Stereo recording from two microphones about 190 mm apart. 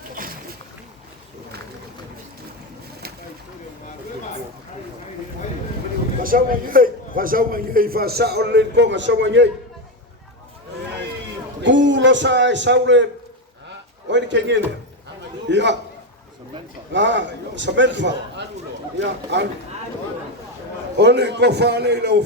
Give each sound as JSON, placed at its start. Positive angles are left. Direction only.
{"t": 6.2, "sound": "a man's voice", "side_deg": -50}
{"t": 11.6, "sound": "a man's voice", "side_deg": -70}
{"t": 14.1, "sound": "a man's voice", "side_deg": -70}
{"t": 16.9, "sound": "a man's voice", "side_deg": -70}
{"t": 21.0, "sound": "a man's voice", "side_deg": -60}